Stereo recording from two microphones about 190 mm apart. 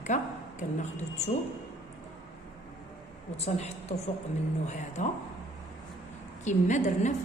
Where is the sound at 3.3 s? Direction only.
35° left (ahead or behind).